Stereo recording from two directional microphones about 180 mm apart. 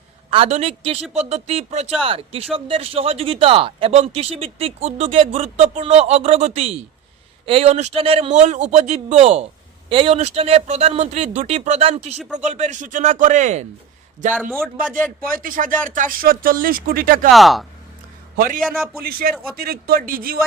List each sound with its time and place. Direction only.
0.3 s speech: 35° right (ahead or behind)
15.2 s speech: 50° right (ahead or behind)
17.3 s speech: centre (ahead or behind)
18.3 s speech: 50° right (ahead or behind)